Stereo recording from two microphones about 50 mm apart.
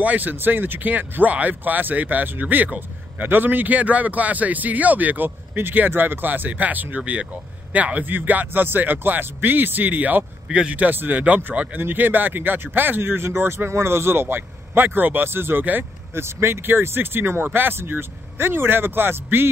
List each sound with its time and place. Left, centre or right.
0.0 s a man's voice: right